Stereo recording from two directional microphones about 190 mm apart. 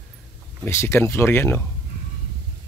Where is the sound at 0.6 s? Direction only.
15° left (ahead or behind).